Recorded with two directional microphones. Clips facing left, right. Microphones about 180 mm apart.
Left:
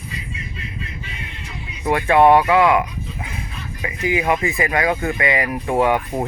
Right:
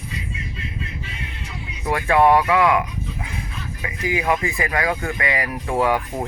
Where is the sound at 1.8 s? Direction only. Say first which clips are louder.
Left 3 dB; 25° left (ahead or behind).